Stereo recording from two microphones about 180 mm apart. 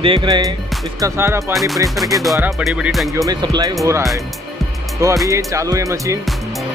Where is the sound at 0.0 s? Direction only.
30° right (ahead or behind).